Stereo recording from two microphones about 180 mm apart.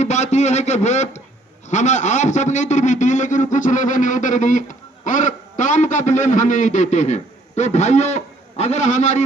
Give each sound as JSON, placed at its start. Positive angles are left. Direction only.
{"t": 0.0, "sound": "a man's voice", "side_deg": 40}